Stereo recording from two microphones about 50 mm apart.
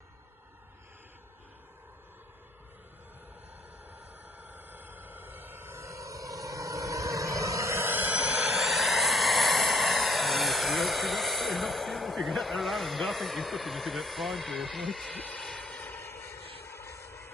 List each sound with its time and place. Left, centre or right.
4.4 s a sound: right
5.8 s vehicle: right
7.9 s a sound: right
8.5 s vehicle: centre
14.8 s speech: centre
15.1 s vehicle: left
15.5 s vehicle: centre
16.0 s vehicle: left